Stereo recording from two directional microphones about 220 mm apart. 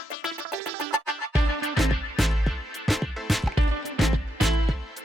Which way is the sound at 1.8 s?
Centre (ahead or behind).